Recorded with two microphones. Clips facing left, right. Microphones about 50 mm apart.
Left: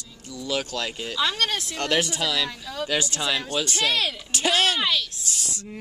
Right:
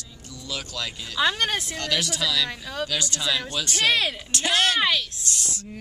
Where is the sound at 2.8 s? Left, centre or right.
Left.